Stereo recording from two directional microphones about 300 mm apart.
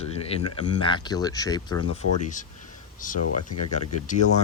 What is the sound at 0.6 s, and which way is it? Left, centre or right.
Speech, centre.